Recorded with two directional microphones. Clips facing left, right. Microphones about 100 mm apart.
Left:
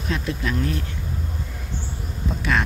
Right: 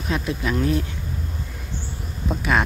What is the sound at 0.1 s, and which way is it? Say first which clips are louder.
Speech: right 2 dB; 10° right (ahead or behind).